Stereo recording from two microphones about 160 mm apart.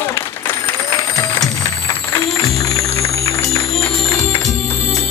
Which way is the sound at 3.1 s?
20° left (ahead or behind).